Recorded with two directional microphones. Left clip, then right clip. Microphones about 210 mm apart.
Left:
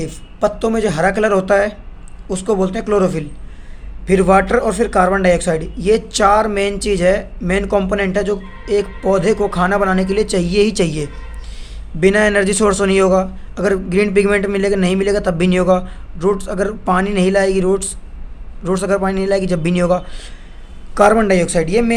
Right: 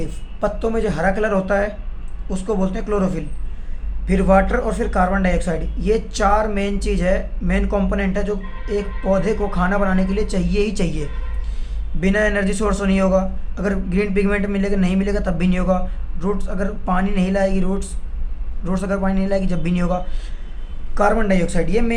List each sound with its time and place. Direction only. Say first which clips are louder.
0.0 s a man's voice: left 5 dB; 50° left (ahead or behind)